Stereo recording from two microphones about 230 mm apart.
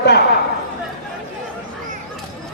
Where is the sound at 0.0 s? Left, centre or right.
Left.